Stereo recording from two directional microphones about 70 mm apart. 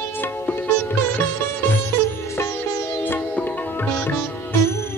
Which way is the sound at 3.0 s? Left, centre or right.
Left.